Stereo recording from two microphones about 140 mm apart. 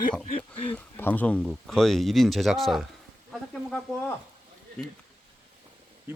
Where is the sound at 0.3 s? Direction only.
40° left (ahead or behind).